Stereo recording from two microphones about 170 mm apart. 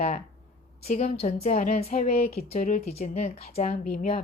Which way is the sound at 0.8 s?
45° left (ahead or behind).